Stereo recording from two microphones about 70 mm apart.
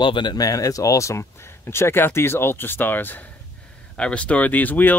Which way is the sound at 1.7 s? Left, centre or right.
Left.